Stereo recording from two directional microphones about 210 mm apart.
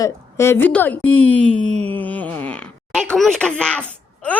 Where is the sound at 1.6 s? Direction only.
30° right (ahead or behind).